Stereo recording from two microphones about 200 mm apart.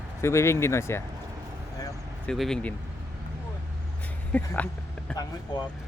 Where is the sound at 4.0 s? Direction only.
10° left (ahead or behind).